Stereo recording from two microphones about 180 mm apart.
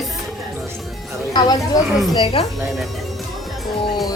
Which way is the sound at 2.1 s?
30° left (ahead or behind).